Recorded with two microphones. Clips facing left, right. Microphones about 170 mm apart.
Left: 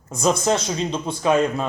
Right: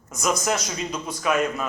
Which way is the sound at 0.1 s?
30° left (ahead or behind).